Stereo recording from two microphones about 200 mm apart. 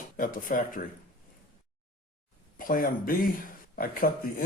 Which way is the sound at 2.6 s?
45° left (ahead or behind).